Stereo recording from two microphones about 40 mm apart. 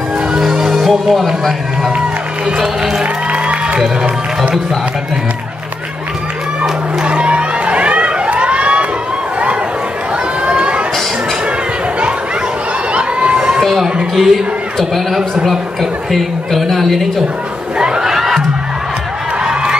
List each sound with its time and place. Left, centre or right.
0.3 s music: centre
0.8 s speech: centre
2.5 s run: centre
3.0 s music: right
7.0 s music: right
8.3 s emergency vehicle: right
10.4 s a sound: right
12.9 s crowd: right
14.1 s a woman's voice: centre
15.4 s a woman's voice: centre
17.7 s a sound: right
18.0 s crowd: centre
19.4 s a sound: right